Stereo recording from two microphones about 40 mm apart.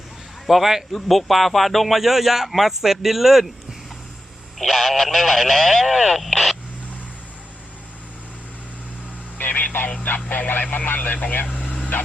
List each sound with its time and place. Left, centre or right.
0.4 s speech: centre
9.4 s a sound: left
10.2 s speech: left